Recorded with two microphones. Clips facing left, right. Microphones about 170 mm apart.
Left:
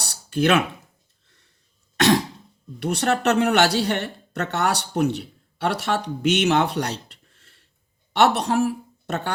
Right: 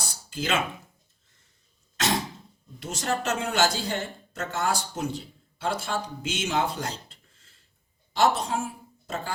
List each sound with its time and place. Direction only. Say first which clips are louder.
0.0 s a sound: left 11 dB; 75° left (ahead or behind)
2.0 s throat clearing: left 9 dB; 70° left (ahead or behind)
2.8 s speech: left 8 dB; 70° left (ahead or behind)